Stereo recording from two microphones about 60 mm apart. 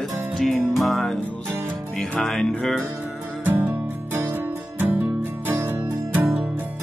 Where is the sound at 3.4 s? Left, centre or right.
Right.